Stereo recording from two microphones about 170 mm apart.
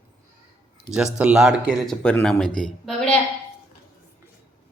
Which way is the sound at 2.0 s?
10° left (ahead or behind).